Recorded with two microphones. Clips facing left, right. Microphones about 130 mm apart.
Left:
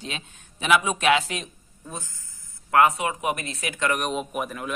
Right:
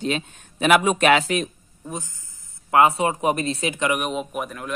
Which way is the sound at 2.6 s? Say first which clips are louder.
Right 2 dB; 25° right (ahead or behind).